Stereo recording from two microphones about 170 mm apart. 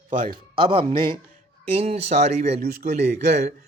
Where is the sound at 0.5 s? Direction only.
30° right (ahead or behind).